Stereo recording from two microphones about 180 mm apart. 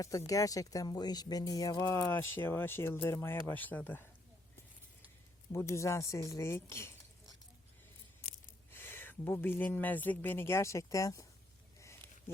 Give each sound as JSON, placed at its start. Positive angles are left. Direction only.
{"t": 0.3, "sound": "speech", "side_deg": 20}
{"t": 5.5, "sound": "speech", "side_deg": 15}
{"t": 8.7, "sound": "speech", "side_deg": 10}